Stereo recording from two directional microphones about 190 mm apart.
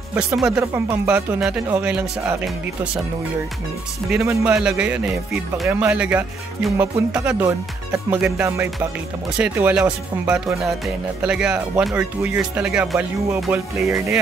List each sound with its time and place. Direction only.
0.1 s speech: 10° right (ahead or behind)
4.2 s speech: 15° right (ahead or behind)
4.6 s speech: 5° right (ahead or behind)
13.8 s speech: 15° right (ahead or behind)